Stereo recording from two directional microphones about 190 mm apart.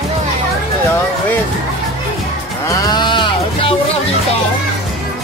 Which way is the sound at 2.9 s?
25° left (ahead or behind).